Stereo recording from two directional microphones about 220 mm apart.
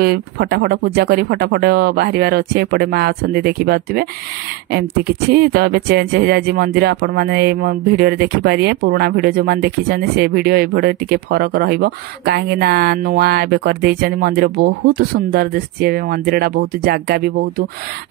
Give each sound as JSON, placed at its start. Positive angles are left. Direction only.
{"t": 0.0, "sound": "speech", "side_deg": -45}